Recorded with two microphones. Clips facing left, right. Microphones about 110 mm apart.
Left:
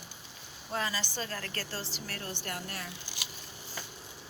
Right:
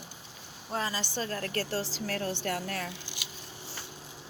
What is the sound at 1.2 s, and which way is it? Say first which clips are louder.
Speech: right 4 dB; 40° right (ahead or behind).